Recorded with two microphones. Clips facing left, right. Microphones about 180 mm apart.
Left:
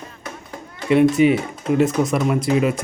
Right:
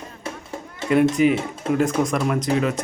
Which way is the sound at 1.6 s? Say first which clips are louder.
Left 3 dB; 5° left (ahead or behind).